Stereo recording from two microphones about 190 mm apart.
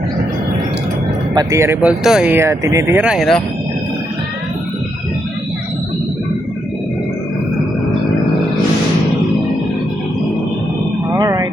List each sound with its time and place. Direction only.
1.3 s speech: 20° right (ahead or behind)
3.0 s speech: 5° right (ahead or behind)
11.1 s a sound: 20° right (ahead or behind)